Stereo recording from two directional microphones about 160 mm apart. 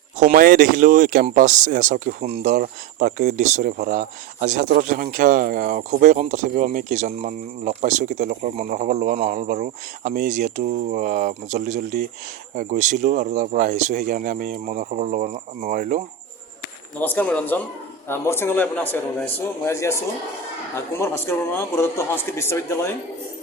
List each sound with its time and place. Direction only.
0.3 s speech: 60° right (ahead or behind)
17.0 s a man's voice: 10° left (ahead or behind)
21.0 s a man's voice: 15° left (ahead or behind)